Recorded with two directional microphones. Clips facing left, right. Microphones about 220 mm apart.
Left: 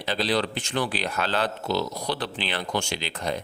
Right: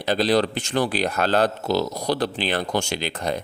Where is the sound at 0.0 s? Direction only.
45° right (ahead or behind).